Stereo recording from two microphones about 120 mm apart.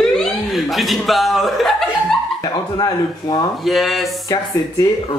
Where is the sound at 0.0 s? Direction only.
Centre (ahead or behind).